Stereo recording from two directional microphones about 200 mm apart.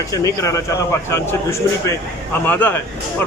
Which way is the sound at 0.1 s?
15° left (ahead or behind).